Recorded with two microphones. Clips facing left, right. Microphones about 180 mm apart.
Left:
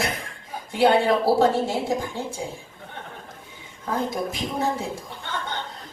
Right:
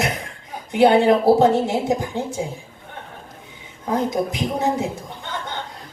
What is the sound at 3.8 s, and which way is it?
A woman's voice, 20° right (ahead or behind).